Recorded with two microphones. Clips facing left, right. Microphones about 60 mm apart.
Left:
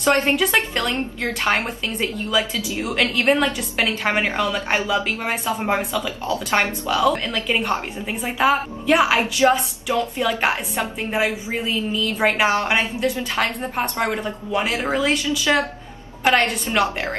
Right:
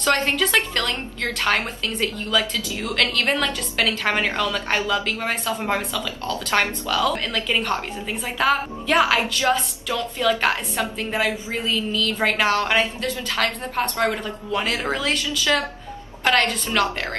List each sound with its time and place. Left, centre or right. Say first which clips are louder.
0.0 s a woman's voice: left 3 dB; centre